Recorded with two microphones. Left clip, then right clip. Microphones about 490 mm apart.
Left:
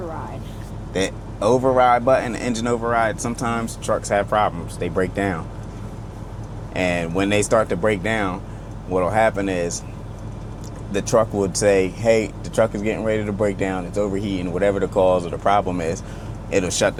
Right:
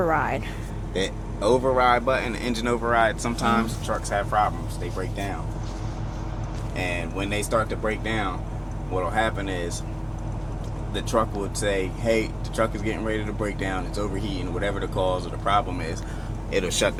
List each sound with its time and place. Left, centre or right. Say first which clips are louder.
0.9 s speech: left 4 dB; left
3.8 s speech: left 6 dB; left
4.9 s speech: left 11 dB; left
6.7 s speech: left 8 dB; left
10.9 s speech: left 6 dB; left